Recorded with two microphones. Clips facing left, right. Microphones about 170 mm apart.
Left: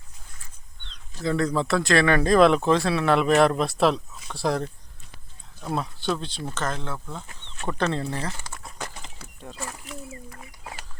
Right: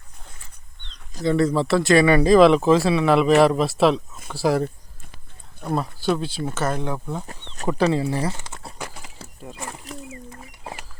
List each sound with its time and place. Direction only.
1.2 s speech: centre (ahead or behind)
7.5 s chicken: 60° right (ahead or behind)
7.9 s speech: 10° right (ahead or behind)
8.3 s crumpling: 25° right (ahead or behind)
8.8 s a sound: 5° right (ahead or behind)
9.9 s speech: 40° right (ahead or behind)
10.2 s speech: 30° right (ahead or behind)